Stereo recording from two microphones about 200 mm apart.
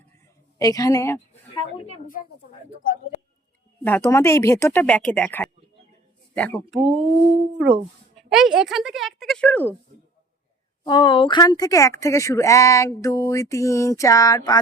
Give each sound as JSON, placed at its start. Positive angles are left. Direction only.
{"t": 0.6, "sound": "speech", "side_deg": 15}
{"t": 1.5, "sound": "a woman's voice", "side_deg": 25}
{"t": 3.8, "sound": "a woman's voice", "side_deg": 10}
{"t": 6.7, "sound": "speech", "side_deg": -30}
{"t": 8.2, "sound": "a woman's voice", "side_deg": 0}
{"t": 10.8, "sound": "speech", "side_deg": 20}